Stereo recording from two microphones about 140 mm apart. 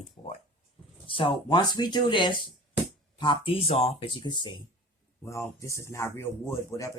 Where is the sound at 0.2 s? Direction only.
40° left (ahead or behind).